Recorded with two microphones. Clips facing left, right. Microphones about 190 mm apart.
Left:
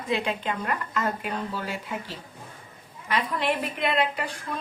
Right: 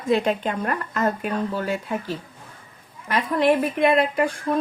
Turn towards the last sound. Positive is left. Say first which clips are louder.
# right 9 dB
turn(degrees=-45)  # may be behind; listen again after turning